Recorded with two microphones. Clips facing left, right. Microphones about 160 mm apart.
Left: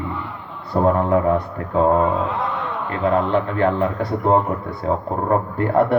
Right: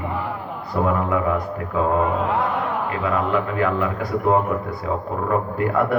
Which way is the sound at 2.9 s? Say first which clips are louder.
Left 6 dB; 30° left (ahead or behind).